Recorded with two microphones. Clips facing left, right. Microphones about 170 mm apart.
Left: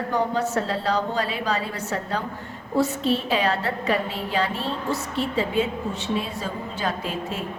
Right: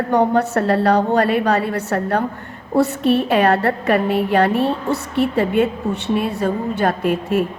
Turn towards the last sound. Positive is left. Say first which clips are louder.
# right 10 dB
turn(degrees=-60)  # may be behind; listen again after turning